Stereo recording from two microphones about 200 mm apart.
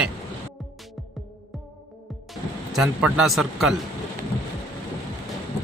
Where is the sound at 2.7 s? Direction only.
5° right (ahead or behind).